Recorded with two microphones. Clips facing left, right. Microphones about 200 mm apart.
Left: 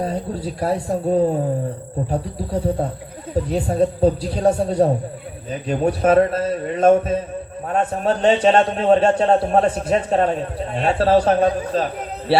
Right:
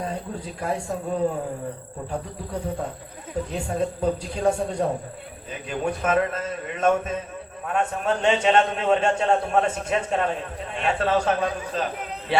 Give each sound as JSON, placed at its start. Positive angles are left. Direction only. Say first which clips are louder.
{"t": 0.0, "sound": "a man's voice", "louder": "left 7 dB", "side_deg": 35}